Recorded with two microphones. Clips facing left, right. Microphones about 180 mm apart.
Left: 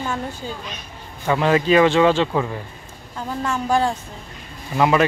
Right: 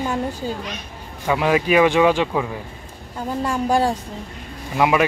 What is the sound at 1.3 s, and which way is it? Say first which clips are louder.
Speech: left 1 dB; 10° right (ahead or behind).